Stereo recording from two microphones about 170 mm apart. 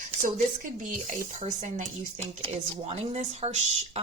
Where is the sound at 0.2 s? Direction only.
50° right (ahead or behind).